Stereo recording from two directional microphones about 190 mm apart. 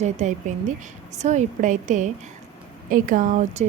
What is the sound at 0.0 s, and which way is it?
Speech, 40° right (ahead or behind).